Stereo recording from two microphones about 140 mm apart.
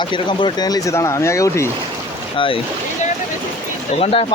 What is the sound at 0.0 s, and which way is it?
Speech, 35° left (ahead or behind).